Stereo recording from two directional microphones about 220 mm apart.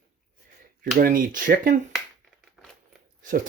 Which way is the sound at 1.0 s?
40° right (ahead or behind).